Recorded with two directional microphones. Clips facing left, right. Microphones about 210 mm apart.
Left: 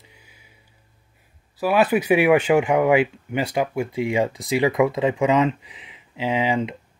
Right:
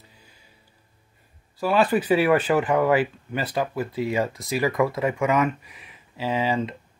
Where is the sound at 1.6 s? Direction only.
10° left (ahead or behind).